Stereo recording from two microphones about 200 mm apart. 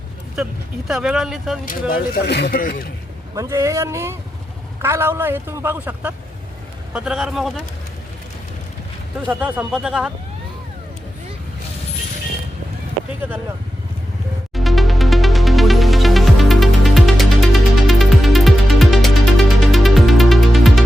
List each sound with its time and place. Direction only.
0.9 s speech: 5° right (ahead or behind)
1.9 s speech: 50° left (ahead or behind)
3.3 s a man's voice: 15° right (ahead or behind); by 7.6 s centre (ahead or behind)
9.2 s speech: 5° right (ahead or behind)
14.5 s music: centre (ahead or behind)